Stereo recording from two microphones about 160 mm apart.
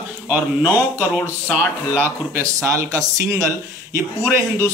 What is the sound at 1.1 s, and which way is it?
Speech, 10° left (ahead or behind).